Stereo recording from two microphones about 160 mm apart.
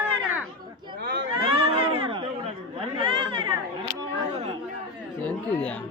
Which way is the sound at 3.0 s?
30° right (ahead or behind).